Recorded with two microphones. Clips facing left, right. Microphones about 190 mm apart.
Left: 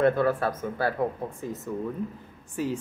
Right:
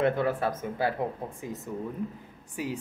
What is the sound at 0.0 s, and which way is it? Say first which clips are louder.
Speech: left 3 dB; 20° right (ahead or behind).